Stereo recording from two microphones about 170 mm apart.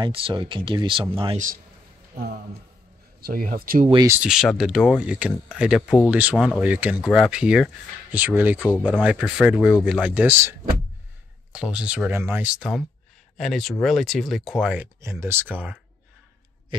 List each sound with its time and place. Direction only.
0.0 s a man's voice: 30° right (ahead or behind)
3.2 s speech: 60° right (ahead or behind)
4.1 s speech: 5° right (ahead or behind)
6.3 s speech: centre (ahead or behind)
6.6 s speech: 10° right (ahead or behind)
11.5 s speech: 5° right (ahead or behind)